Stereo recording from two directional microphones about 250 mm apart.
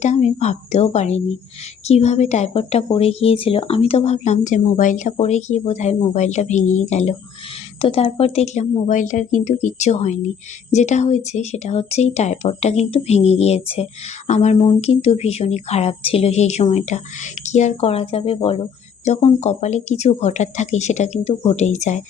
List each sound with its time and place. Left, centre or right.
0.0 s a woman's voice: left